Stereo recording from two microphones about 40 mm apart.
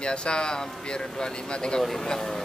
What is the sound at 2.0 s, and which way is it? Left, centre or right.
Speech, centre.